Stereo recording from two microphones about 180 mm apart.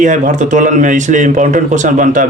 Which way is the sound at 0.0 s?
45° right (ahead or behind).